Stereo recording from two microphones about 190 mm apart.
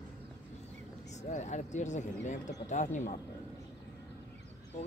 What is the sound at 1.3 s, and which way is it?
Speech, 40° left (ahead or behind).